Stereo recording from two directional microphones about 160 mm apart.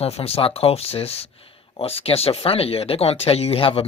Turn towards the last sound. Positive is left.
turn(degrees=35)  # may be behind; listen again after turning